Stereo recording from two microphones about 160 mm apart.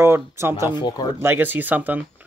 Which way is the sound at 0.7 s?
25° left (ahead or behind).